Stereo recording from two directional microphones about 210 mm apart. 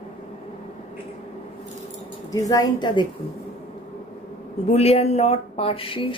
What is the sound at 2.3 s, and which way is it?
Speech, 15° left (ahead or behind).